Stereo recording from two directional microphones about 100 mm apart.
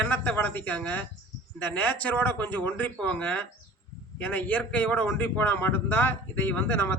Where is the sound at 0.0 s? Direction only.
20° left (ahead or behind).